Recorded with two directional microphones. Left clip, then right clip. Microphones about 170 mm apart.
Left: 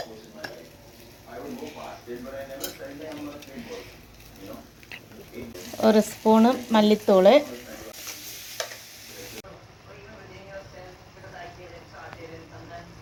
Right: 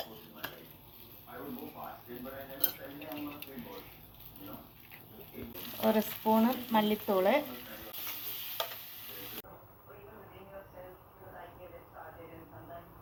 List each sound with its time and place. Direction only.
5.8 s frying: 50° left (ahead or behind)